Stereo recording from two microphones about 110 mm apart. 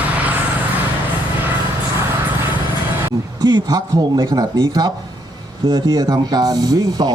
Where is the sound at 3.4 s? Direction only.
40° right (ahead or behind).